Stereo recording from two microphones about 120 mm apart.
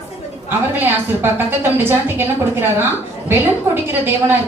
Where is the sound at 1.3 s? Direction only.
20° right (ahead or behind).